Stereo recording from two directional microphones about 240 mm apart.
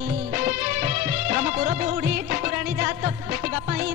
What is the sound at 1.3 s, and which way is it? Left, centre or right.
Music, right.